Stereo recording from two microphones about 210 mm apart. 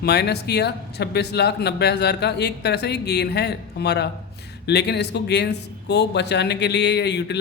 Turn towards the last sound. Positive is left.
turn(degrees=55)  # may be behind; listen again after turning